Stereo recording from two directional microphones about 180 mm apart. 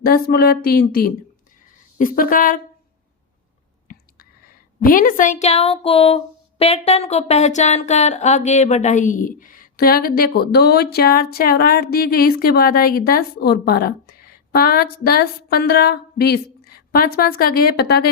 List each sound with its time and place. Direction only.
0.0 s a woman's voice: 55° left (ahead or behind)
3.9 s whispering: 55° left (ahead or behind)
4.8 s speech: 50° left (ahead or behind)